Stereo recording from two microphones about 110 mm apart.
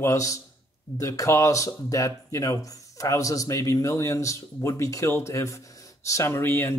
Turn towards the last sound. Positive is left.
turn(degrees=20)  # may be behind; listen again after turning